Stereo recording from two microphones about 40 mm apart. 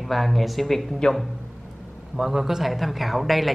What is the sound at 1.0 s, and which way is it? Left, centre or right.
Speech, centre.